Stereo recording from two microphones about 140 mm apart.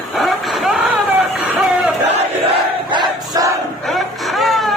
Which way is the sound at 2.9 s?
25° right (ahead or behind).